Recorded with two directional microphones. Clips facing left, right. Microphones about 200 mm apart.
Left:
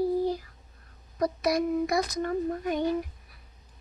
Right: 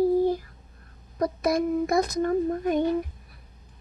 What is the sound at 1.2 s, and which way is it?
A child's voice, 50° right (ahead or behind).